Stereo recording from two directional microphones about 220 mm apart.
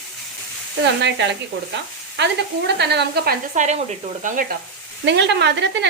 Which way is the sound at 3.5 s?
30° right (ahead or behind).